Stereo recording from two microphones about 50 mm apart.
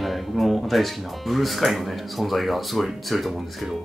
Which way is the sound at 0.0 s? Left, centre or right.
Centre.